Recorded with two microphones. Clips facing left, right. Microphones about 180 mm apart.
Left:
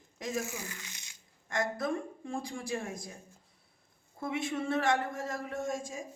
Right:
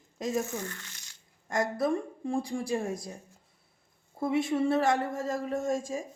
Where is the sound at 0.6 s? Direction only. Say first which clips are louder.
Right 5 dB; 10° left (ahead or behind).